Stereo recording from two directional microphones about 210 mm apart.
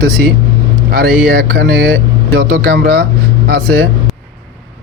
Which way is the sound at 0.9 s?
50° right (ahead or behind).